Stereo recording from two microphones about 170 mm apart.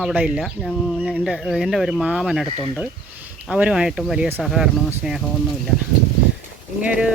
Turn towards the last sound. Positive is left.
turn(degrees=-5)  # may be behind; listen again after turning